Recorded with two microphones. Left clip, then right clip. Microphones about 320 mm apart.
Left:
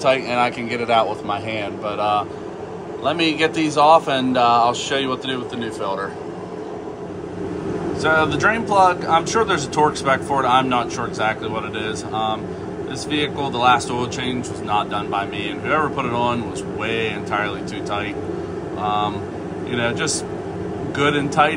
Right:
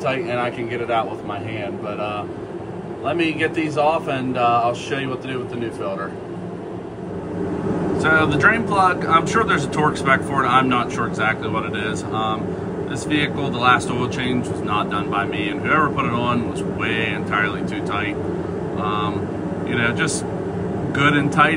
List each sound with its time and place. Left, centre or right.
0.0 s speech: centre
8.0 s speech: centre
18.8 s speech: centre